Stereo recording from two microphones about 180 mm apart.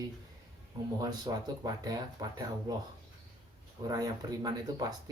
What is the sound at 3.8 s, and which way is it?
Speech, 20° right (ahead or behind).